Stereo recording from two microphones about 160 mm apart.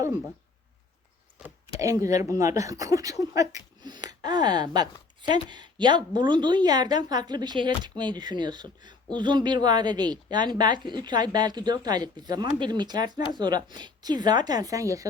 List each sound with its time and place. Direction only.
1.8 s speech: 20° right (ahead or behind)